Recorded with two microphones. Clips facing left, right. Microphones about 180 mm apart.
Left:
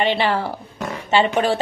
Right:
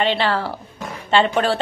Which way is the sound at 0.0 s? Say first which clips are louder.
Even; 15° left (ahead or behind).